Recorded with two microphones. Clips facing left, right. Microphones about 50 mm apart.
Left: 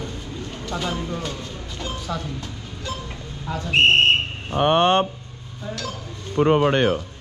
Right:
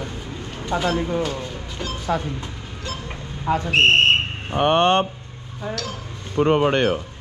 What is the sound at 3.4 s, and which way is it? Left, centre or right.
Speech, right.